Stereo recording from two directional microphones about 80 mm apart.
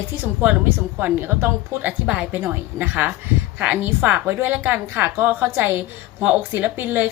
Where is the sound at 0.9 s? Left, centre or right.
Right.